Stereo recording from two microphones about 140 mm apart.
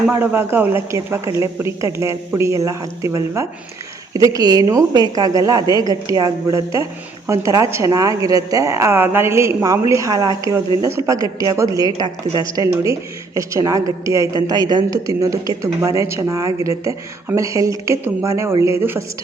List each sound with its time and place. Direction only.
0.1 s a woman's voice: 15° right (ahead or behind)